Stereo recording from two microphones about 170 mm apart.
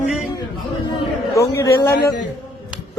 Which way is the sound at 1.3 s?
20° left (ahead or behind).